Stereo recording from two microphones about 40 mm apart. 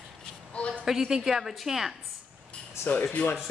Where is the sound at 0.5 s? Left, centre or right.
Left.